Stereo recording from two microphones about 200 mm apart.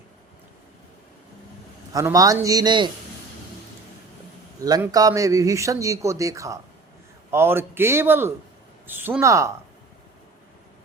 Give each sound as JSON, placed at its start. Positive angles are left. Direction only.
{"t": 1.9, "sound": "speech", "side_deg": -15}
{"t": 4.6, "sound": "speech", "side_deg": -20}